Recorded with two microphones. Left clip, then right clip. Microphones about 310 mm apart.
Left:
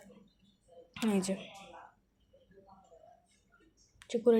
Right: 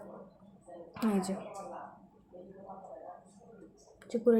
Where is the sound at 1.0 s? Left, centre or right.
Left.